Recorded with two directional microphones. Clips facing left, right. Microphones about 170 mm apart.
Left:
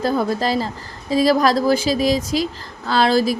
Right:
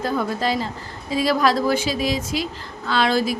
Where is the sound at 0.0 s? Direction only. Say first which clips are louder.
Left 3 dB; 35° left (ahead or behind).